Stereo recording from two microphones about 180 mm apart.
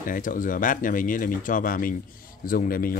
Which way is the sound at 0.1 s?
45° left (ahead or behind).